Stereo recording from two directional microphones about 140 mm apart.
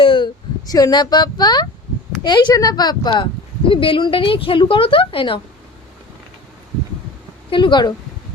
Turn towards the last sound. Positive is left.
turn(degrees=35)  # may be behind; listen again after turning